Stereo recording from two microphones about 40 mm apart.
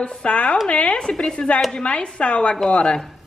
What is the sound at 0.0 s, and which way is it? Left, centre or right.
A woman's voice, left.